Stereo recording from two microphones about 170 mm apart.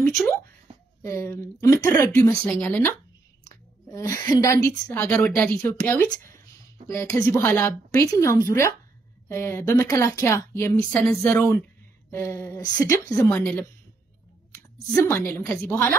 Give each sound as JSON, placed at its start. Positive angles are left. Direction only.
{"t": 1.0, "sound": "a woman's voice", "side_deg": 15}